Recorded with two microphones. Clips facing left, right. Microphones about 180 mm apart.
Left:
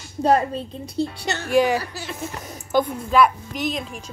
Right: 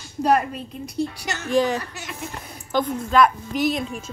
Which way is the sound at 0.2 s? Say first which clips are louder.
Left 1 dB; 30° left (ahead or behind).